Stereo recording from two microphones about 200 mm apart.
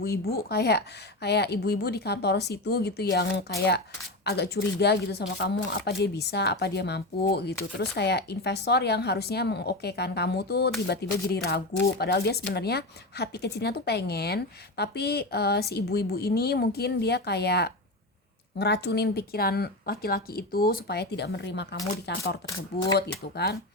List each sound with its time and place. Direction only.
0.0 s speech: 50° left (ahead or behind)
22.4 s speech: 20° left (ahead or behind)
23.0 s speech: 55° left (ahead or behind)